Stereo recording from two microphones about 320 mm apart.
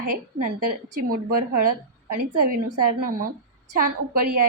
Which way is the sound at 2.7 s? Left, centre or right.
Right.